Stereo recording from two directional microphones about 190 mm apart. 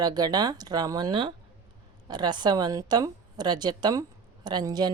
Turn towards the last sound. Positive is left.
turn(degrees=-20)  # may be behind; listen again after turning